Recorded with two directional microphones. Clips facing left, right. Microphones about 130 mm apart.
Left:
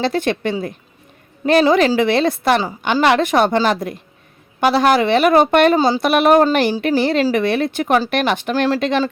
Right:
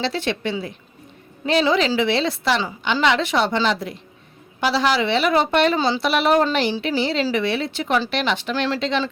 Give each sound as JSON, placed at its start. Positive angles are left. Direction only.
{"t": 0.0, "sound": "a woman's voice", "side_deg": 50}